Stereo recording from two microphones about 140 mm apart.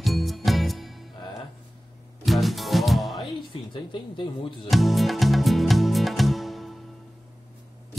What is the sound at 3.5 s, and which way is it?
Speech, 40° left (ahead or behind).